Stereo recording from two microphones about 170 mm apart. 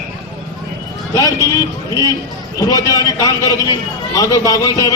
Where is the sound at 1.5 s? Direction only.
20° left (ahead or behind).